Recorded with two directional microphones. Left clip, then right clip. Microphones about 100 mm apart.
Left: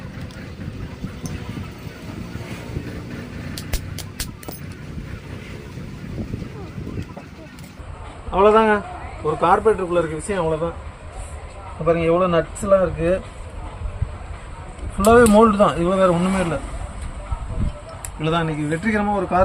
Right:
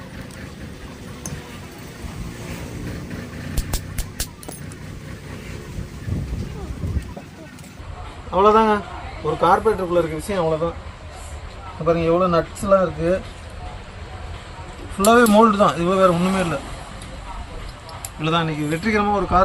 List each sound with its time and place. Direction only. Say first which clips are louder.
8.3 s a man's voice: even; 30° left (ahead or behind)
9.9 s speech: right 1 dB; 20° left (ahead or behind)
11.9 s a man's voice: even; 15° left (ahead or behind)
12.6 s speech: even; 40° left (ahead or behind)
15.0 s speech: left 1 dB; 75° left (ahead or behind); by 16.6 s 90° left
18.2 s speech: right 1 dB; 90° left